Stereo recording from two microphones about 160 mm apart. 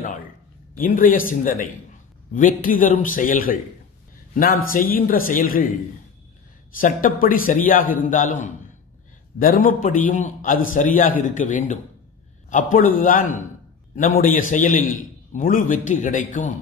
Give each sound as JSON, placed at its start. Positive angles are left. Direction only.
{"t": 0.7, "sound": "a man's voice", "side_deg": 60}
{"t": 6.8, "sound": "a man's voice", "side_deg": 60}